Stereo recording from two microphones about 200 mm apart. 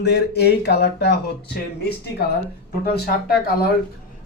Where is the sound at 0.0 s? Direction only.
55° left (ahead or behind).